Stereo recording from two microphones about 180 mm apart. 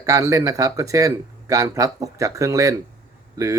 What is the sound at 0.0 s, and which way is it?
Speech, 20° right (ahead or behind).